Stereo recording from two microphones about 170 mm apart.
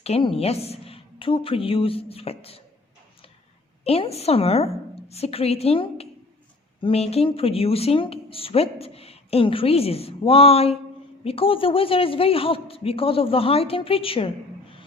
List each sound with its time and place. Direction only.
0.0 s speech: 35° left (ahead or behind)
3.8 s speech: 35° left (ahead or behind)